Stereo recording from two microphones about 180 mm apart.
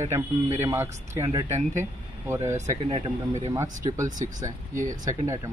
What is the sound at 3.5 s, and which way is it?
Speech, 20° right (ahead or behind).